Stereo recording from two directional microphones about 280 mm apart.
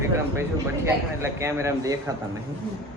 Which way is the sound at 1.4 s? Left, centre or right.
Centre.